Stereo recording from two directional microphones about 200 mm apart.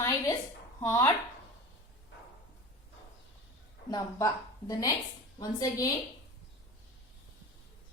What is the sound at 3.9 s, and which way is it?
A woman's voice, 15° left (ahead or behind).